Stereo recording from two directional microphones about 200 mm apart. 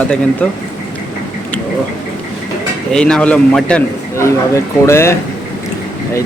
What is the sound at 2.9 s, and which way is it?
A man's voice, 5° left (ahead or behind).